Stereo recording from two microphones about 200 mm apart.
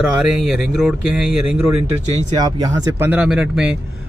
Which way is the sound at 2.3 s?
20° right (ahead or behind).